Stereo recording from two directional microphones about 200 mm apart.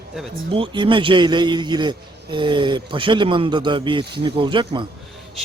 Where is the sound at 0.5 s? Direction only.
25° right (ahead or behind).